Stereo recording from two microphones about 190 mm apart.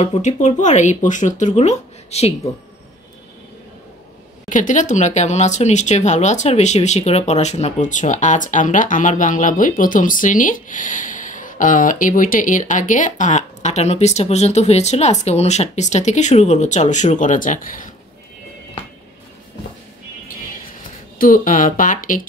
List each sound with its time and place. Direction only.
0.0 s speech: 35° left (ahead or behind)
4.5 s speech: 40° left (ahead or behind)
21.2 s speech: 45° left (ahead or behind)